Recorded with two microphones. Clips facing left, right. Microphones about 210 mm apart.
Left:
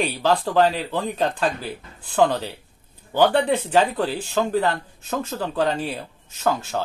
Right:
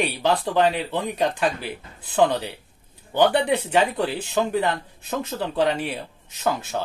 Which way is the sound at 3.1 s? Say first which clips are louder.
Left 1 dB; 20° right (ahead or behind).